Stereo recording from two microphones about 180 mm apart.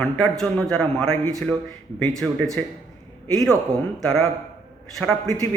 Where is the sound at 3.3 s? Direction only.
Centre (ahead or behind).